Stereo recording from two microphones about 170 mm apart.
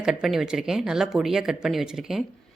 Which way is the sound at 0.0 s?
5° right (ahead or behind).